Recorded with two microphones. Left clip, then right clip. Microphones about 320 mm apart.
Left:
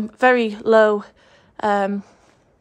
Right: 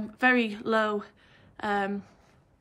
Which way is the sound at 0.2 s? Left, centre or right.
Centre.